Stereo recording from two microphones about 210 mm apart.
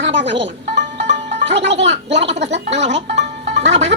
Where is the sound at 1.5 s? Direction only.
55° right (ahead or behind).